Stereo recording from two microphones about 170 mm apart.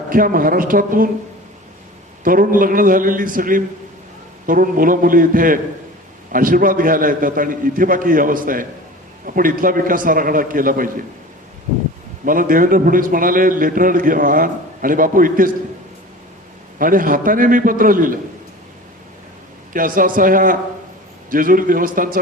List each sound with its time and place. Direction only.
0.1 s a man's voice: 55° right (ahead or behind)
2.2 s a man's voice: 55° right (ahead or behind)
12.2 s a man's voice: 55° right (ahead or behind)
16.7 s a man's voice: 55° right (ahead or behind)
19.7 s a man's voice: 55° right (ahead or behind)